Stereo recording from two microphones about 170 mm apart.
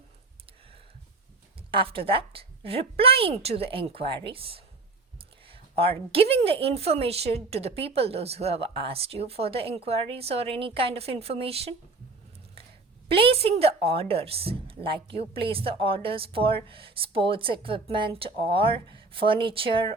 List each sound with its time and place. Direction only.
1.7 s a woman's voice: 30° right (ahead or behind)
13.1 s a woman's voice: 35° right (ahead or behind)